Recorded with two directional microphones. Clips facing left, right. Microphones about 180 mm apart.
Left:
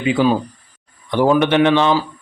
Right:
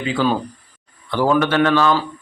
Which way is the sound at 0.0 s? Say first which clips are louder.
Left 4 dB; 15° left (ahead or behind).